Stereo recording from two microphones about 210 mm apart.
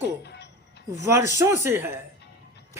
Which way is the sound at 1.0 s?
15° right (ahead or behind).